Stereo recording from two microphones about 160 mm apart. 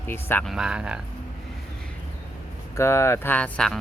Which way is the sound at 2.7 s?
15° left (ahead or behind).